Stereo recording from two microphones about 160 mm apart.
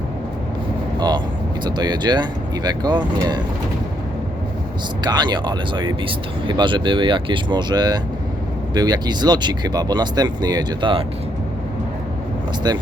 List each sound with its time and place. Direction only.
0.9 s speech: 25° right (ahead or behind)
5.0 s speech: 25° right (ahead or behind)
12.7 s speech: 25° right (ahead or behind)